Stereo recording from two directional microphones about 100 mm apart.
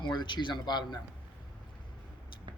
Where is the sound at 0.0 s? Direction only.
50° left (ahead or behind).